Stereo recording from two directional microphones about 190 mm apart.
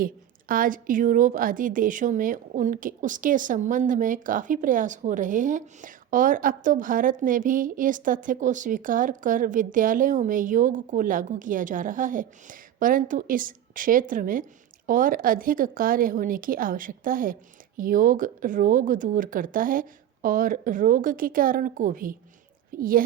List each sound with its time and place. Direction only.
0.0 s a woman's voice: 45° right (ahead or behind)